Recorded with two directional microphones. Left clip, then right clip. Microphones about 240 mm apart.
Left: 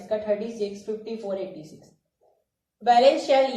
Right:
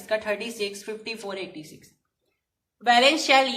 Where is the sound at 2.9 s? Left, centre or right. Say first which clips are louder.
Even; centre.